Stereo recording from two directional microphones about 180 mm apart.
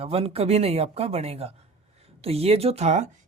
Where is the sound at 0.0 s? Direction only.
30° right (ahead or behind).